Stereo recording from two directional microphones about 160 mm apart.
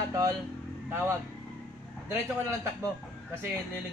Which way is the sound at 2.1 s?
15° right (ahead or behind).